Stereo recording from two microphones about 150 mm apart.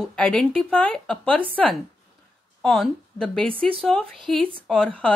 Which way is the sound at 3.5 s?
35° right (ahead or behind).